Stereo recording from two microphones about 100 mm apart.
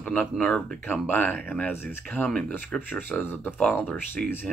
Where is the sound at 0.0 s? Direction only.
15° left (ahead or behind).